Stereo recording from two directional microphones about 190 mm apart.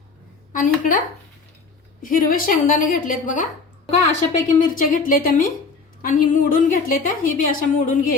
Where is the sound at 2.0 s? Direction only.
45° left (ahead or behind).